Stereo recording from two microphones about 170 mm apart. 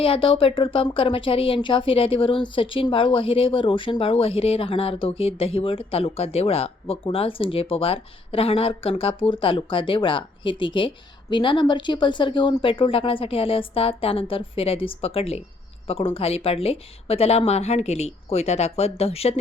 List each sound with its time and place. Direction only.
0.0 s speech: 30° left (ahead or behind)